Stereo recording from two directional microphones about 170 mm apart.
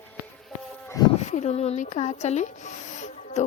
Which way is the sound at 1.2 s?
40° left (ahead or behind).